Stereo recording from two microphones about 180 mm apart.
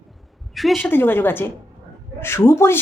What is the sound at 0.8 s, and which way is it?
Speech, 10° left (ahead or behind).